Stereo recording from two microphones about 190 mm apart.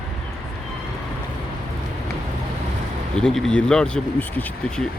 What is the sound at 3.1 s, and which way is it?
Speech, centre (ahead or behind).